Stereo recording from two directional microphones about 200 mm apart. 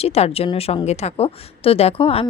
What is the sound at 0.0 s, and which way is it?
A woman's voice, 30° left (ahead or behind).